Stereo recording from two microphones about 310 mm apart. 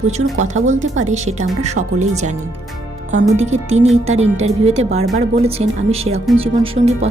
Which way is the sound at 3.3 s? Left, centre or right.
Right.